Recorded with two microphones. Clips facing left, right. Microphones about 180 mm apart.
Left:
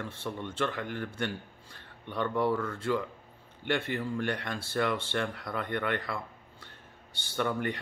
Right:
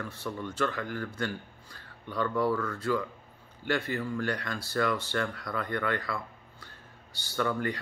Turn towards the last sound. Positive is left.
turn(degrees=20)  # may be behind; listen again after turning